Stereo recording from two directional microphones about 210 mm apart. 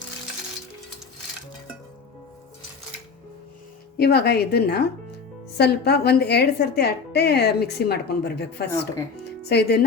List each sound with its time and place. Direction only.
3.9 s a woman's voice: 50° left (ahead or behind)